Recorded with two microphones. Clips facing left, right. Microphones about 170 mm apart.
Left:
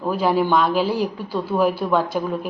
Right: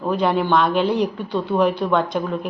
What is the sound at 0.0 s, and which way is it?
A woman's voice, 5° left (ahead or behind).